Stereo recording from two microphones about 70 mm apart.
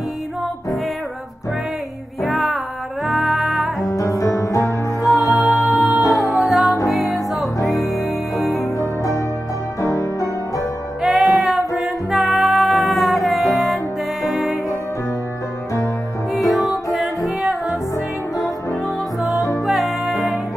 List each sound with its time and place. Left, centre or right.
2.2 s music: centre
3.9 s music: left
5.4 s music: centre
9.8 s music: left
11.0 s music: centre
16.3 s music: centre
17.9 s music: left
19.6 s music: centre